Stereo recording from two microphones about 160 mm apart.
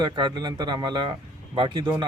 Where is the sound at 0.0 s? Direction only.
30° right (ahead or behind).